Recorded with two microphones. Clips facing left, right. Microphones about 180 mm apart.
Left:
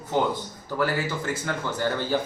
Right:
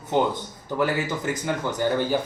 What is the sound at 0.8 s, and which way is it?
Speech, 20° right (ahead or behind).